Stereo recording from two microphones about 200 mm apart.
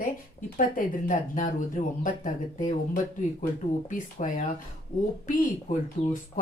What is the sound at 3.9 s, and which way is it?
Speech, 40° left (ahead or behind).